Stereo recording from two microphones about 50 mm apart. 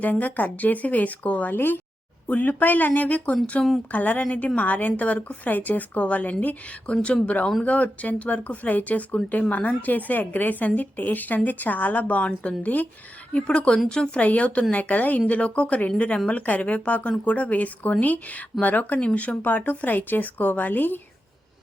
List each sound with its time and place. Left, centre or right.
0.0 s speech: left
1.5 s speech: left
2.2 s speech: left
13.3 s speech: left